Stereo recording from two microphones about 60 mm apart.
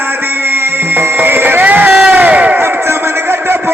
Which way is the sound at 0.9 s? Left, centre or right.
Right.